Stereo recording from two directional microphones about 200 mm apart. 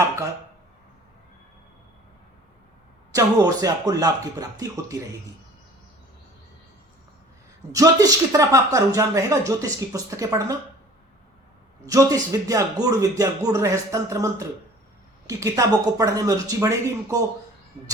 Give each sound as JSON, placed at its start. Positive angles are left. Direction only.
{"t": 3.1, "sound": "speech", "side_deg": -15}
{"t": 7.7, "sound": "speech", "side_deg": -15}
{"t": 11.9, "sound": "speech", "side_deg": -15}